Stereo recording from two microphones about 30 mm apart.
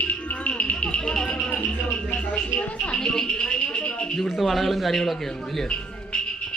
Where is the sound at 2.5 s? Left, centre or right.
Left.